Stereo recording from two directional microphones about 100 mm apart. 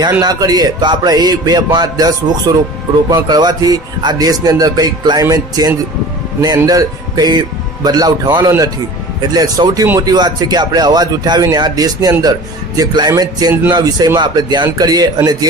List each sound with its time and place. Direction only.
0.2 s speech: 40° right (ahead or behind)